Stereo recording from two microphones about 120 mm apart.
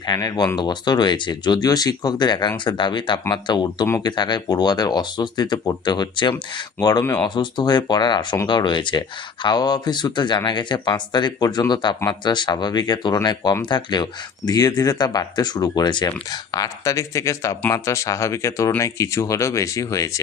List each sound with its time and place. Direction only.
0.1 s speech: 30° left (ahead or behind)
7.0 s speech: 20° left (ahead or behind)
7.3 s speech: 40° left (ahead or behind)